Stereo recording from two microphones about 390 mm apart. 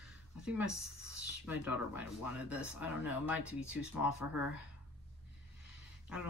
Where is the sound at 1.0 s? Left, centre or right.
Right.